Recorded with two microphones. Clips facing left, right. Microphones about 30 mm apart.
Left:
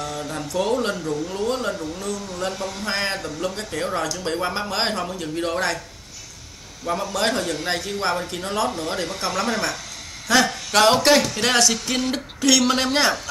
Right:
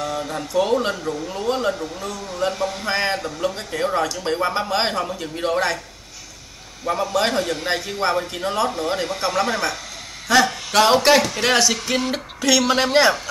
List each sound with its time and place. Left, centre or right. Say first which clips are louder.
0.0 s speech: right 3 dB; centre
6.8 s speech: right 3 dB; centre